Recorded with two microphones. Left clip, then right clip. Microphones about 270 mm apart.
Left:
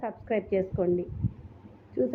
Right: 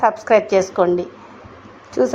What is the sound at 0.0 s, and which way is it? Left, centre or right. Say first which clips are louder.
Speech: right 17 dB; centre.